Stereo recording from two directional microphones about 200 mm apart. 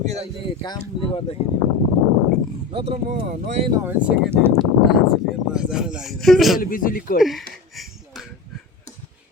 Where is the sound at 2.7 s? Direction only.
30° right (ahead or behind).